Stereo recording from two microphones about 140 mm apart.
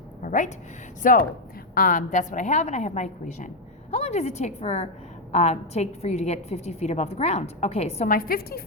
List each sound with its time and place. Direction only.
0.2 s a woman's voice: 70° left (ahead or behind); by 8.0 s 50° left (ahead or behind)
8.0 s a woman's voice: 85° left